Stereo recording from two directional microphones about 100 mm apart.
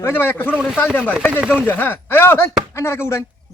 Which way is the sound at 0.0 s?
25° left (ahead or behind).